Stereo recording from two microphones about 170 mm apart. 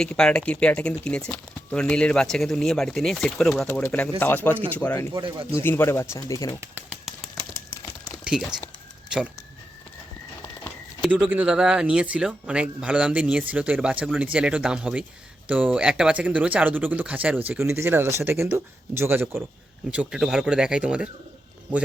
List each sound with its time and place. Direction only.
0.0 s speech: 5° left (ahead or behind)
5.2 s speech: 30° right (ahead or behind)
5.5 s speech: 15° left (ahead or behind)
6.6 s speech: 10° right (ahead or behind)
8.2 s speech: 5° right (ahead or behind)
11.0 s speech: 10° right (ahead or behind)